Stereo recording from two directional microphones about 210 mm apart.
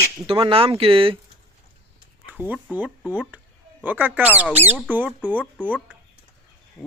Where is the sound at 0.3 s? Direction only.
25° right (ahead or behind).